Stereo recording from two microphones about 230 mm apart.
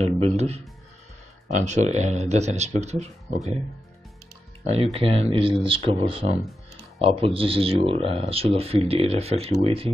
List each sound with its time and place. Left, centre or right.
0.0 s speech: right
4.6 s speech: right